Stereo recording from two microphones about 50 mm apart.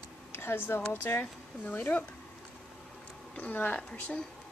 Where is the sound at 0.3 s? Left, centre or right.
Left.